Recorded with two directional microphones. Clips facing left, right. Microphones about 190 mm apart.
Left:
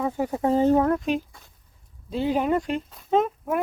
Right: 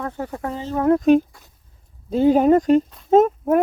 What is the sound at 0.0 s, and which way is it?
Speech, 10° left (ahead or behind).